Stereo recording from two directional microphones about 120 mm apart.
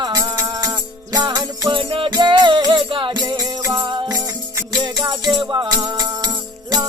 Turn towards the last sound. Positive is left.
turn(degrees=-35)  # may be behind; listen again after turning